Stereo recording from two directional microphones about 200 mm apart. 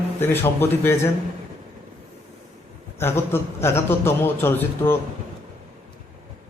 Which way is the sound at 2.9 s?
10° left (ahead or behind).